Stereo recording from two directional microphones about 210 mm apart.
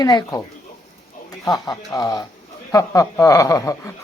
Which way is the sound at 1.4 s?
20° left (ahead or behind).